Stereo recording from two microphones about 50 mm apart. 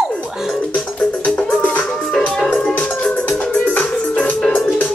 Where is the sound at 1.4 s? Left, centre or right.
Left.